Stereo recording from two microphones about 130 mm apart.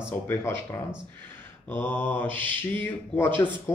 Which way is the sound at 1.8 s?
15° left (ahead or behind).